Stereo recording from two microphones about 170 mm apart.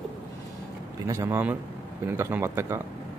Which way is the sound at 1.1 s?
15° right (ahead or behind).